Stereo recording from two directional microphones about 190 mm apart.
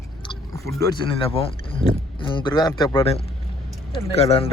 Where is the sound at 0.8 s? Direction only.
20° left (ahead or behind).